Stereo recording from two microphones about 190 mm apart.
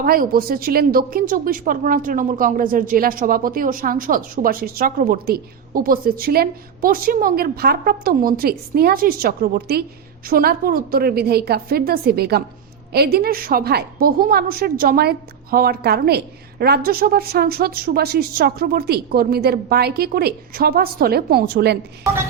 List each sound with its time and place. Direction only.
0.0 s a woman's voice: 50° right (ahead or behind)